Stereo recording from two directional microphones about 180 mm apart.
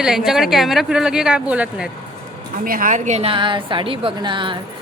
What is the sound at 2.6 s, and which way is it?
A woman's voice, 50° right (ahead or behind).